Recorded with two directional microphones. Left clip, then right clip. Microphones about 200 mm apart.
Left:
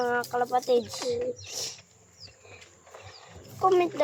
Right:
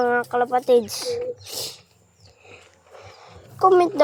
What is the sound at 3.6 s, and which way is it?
Speech, 25° right (ahead or behind).